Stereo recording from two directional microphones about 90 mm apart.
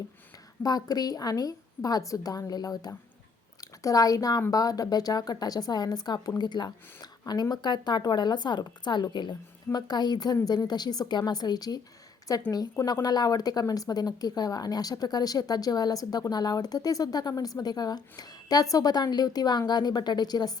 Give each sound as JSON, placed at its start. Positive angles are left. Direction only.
{"t": 0.6, "sound": "a woman's voice", "side_deg": 45}